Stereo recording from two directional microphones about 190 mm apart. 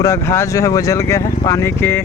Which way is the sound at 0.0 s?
15° left (ahead or behind).